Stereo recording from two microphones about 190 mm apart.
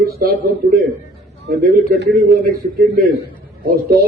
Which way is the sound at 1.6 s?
50° right (ahead or behind).